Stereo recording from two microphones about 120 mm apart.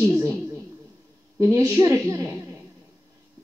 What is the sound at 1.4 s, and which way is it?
Speech, 25° right (ahead or behind).